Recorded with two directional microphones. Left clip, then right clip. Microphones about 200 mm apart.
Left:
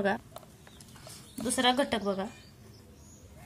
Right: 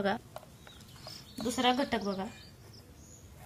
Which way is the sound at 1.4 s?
25° left (ahead or behind).